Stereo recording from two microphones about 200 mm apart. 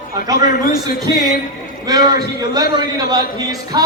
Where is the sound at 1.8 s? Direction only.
20° right (ahead or behind).